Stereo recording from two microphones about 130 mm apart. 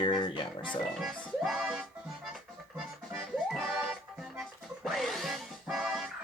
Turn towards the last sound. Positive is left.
turn(degrees=-5)  # may be behind; listen again after turning